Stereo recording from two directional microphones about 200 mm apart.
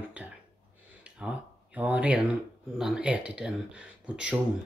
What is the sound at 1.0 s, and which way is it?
Speech, 5° right (ahead or behind).